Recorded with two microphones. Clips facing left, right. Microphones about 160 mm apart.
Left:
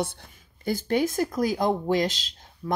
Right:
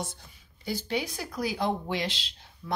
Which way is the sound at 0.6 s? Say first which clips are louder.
Left 7 dB; 50° left (ahead or behind).